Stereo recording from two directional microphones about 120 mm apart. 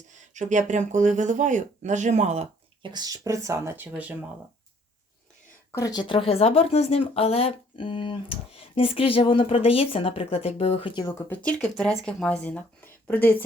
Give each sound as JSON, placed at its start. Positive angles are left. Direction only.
{"t": 0.1, "sound": "speech", "side_deg": -85}
{"t": 2.8, "sound": "speech", "side_deg": -35}
{"t": 5.7, "sound": "speech", "side_deg": 30}
{"t": 7.8, "sound": "speech", "side_deg": 45}
{"t": 11.1, "sound": "speech", "side_deg": 10}